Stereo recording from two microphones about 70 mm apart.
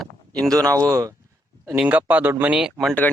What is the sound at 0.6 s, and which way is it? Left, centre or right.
Speech, right.